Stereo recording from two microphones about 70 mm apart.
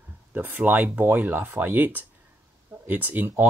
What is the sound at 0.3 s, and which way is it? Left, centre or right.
Speech, right.